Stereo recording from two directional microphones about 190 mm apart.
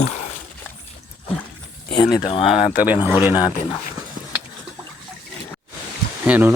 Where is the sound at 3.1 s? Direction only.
10° right (ahead or behind).